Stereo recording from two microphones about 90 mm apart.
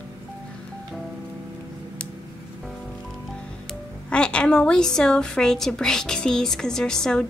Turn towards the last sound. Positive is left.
turn(degrees=5)  # may be behind; listen again after turning